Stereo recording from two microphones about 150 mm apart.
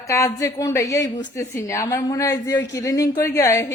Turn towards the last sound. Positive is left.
turn(degrees=20)  # may be behind; listen again after turning